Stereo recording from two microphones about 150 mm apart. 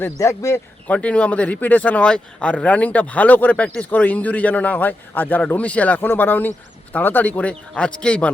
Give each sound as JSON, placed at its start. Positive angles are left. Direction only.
{"t": 0.0, "sound": "speech", "side_deg": 20}